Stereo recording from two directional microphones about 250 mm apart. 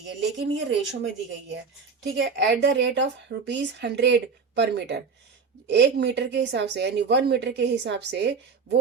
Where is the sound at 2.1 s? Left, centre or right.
Right.